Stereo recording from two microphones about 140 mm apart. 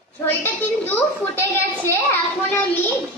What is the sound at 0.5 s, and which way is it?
Speech, 10° left (ahead or behind).